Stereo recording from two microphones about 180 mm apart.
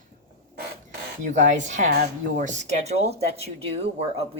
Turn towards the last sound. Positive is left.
turn(degrees=-35)  # may be behind; listen again after turning